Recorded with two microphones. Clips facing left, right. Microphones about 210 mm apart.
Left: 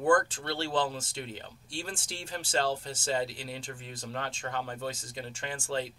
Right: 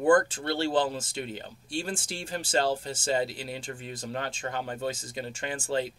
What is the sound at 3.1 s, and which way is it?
Speech, 10° right (ahead or behind).